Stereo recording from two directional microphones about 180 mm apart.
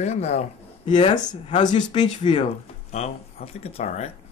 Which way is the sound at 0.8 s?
25° left (ahead or behind).